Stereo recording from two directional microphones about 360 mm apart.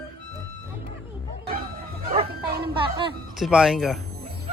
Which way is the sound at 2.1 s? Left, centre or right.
Centre.